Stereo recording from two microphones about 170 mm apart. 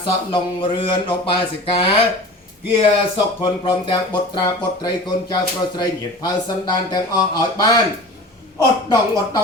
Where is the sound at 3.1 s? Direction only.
25° left (ahead or behind).